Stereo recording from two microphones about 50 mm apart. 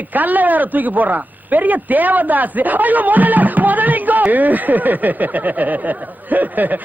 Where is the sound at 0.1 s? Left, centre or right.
Right.